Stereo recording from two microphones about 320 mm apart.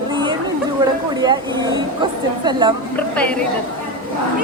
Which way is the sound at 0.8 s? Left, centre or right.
Centre.